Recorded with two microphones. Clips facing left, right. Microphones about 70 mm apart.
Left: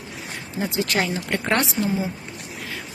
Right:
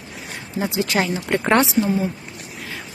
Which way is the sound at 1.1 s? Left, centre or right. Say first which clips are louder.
Right 4 dB; centre.